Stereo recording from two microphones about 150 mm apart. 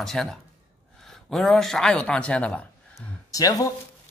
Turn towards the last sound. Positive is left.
turn(degrees=25)  # may be behind; listen again after turning